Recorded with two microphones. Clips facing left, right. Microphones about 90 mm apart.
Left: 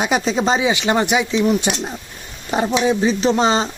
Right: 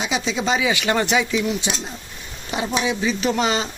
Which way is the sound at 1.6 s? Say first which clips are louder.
Left 5 dB; 55° left (ahead or behind).